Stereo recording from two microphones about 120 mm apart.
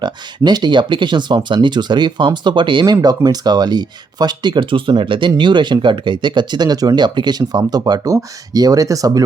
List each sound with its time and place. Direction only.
0.0 s speech: 40° right (ahead or behind)